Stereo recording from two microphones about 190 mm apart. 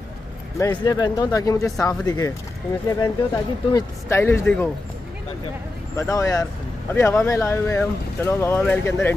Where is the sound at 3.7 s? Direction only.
15° left (ahead or behind).